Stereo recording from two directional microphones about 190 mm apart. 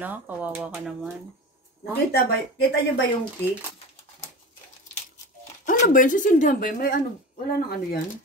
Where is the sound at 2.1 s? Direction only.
65° left (ahead or behind).